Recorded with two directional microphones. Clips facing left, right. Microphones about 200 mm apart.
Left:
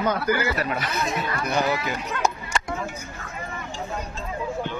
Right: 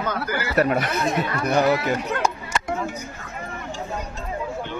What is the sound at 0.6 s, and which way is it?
Speech, 55° right (ahead or behind).